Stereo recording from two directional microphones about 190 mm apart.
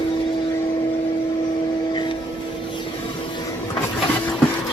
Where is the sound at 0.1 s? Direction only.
25° left (ahead or behind).